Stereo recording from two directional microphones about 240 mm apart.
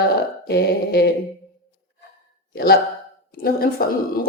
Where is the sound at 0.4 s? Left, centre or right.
Left.